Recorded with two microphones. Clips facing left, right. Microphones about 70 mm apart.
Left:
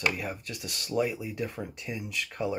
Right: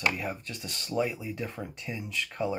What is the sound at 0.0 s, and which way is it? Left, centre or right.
Speech, centre.